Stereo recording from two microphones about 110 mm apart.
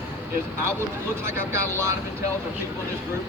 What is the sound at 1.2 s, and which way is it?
Speech, 25° right (ahead or behind).